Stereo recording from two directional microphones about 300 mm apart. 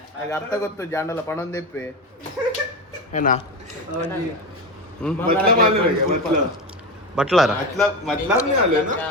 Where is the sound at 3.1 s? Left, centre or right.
Left.